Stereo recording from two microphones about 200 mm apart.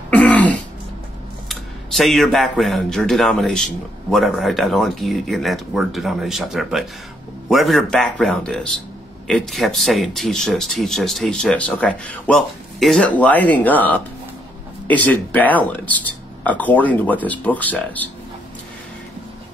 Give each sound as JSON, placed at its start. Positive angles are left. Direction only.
{"t": 0.1, "sound": "throat clearing", "side_deg": 5}
{"t": 1.5, "sound": "speech", "side_deg": 0}